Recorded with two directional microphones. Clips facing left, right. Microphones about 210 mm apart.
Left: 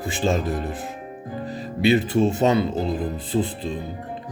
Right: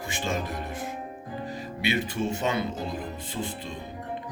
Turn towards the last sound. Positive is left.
turn(degrees=35)  # may be behind; listen again after turning